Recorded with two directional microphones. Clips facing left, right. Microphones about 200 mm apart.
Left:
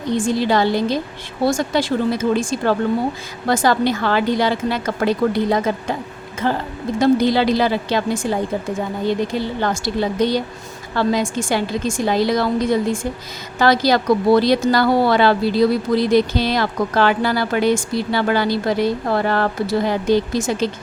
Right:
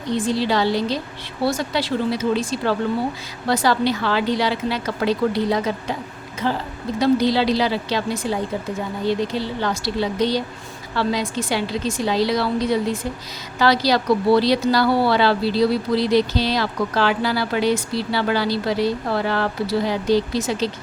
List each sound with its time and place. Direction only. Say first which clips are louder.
0.2 s a woman's voice: left 3 dB; 50° left (ahead or behind)